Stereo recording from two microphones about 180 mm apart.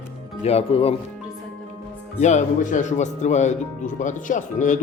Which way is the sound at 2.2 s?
40° left (ahead or behind).